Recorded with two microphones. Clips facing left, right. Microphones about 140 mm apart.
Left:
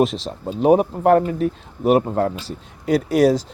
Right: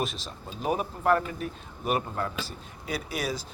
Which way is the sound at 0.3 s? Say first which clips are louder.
Left 14 dB; 85° left.